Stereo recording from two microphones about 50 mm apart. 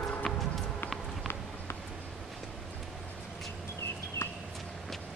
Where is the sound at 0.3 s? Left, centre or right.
Centre.